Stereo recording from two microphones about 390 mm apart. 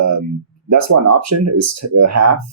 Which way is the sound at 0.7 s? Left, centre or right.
Right.